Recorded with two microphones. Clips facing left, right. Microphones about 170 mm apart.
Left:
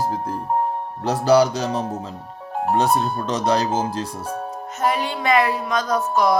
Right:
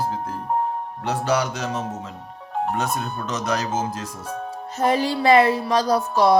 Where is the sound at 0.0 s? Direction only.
40° left (ahead or behind).